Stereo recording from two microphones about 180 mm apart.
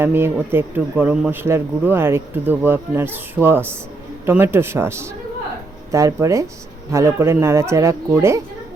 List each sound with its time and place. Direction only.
0.0 s speech: 10° right (ahead or behind)